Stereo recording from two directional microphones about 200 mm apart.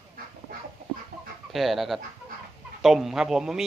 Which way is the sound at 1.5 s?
Centre (ahead or behind).